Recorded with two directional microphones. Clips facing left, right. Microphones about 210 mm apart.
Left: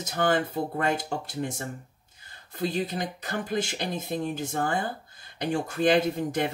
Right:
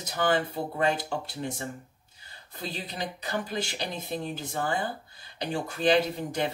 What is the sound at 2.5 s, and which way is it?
Speech, 50° left (ahead or behind).